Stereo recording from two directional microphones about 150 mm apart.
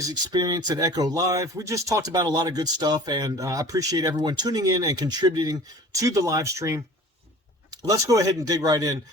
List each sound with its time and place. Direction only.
0.0 s speech: 30° right (ahead or behind)